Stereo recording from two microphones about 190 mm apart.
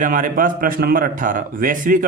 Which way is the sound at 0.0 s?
45° right (ahead or behind).